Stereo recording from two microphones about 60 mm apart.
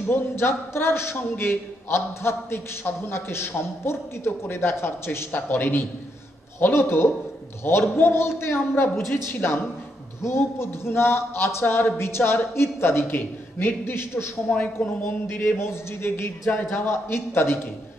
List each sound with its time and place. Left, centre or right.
0.0 s a man's voice: left
14.5 s speech: left
15.2 s a man's voice: left